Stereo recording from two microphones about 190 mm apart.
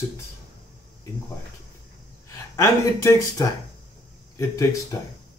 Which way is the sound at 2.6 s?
15° left (ahead or behind).